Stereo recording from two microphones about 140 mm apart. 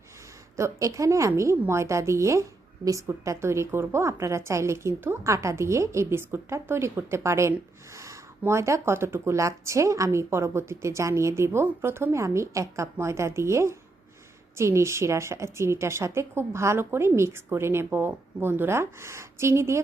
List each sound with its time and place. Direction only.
0.5 s a woman's voice: 20° right (ahead or behind)